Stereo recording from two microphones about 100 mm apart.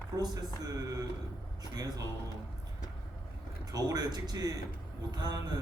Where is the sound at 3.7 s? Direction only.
40° right (ahead or behind).